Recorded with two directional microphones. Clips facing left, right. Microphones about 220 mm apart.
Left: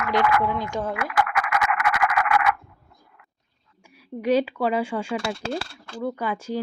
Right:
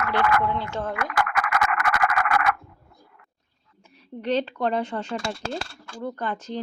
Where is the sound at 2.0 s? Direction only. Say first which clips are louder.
Left 2 dB; 45° right (ahead or behind).